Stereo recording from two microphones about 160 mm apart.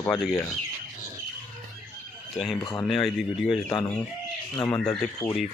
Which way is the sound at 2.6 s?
25° left (ahead or behind).